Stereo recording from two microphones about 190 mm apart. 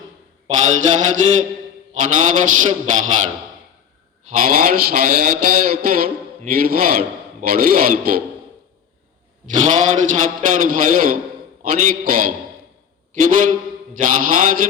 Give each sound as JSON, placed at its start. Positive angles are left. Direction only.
{"t": 0.4, "sound": "a sound", "side_deg": -40}
{"t": 4.4, "sound": "a man's voice", "side_deg": -50}
{"t": 9.5, "sound": "a man's voice", "side_deg": -40}